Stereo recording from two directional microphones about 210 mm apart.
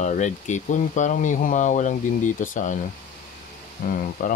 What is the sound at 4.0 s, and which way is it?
Speech, 40° left (ahead or behind).